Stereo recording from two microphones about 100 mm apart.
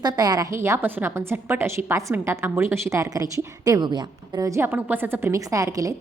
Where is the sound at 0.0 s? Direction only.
40° right (ahead or behind).